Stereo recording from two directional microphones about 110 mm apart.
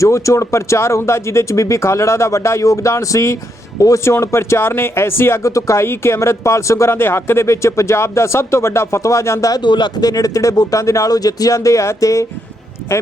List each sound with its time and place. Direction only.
0.0 s speech: 25° left (ahead or behind)
9.6 s speech: 45° left (ahead or behind); by 13.0 s 25° left (ahead or behind)